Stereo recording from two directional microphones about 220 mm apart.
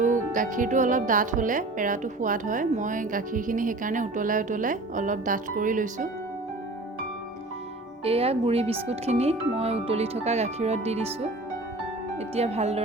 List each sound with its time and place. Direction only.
0.0 s speech: 35° right (ahead or behind)
8.0 s speech: 25° right (ahead or behind)